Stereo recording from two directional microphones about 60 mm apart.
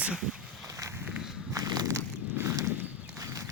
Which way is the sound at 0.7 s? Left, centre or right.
Right.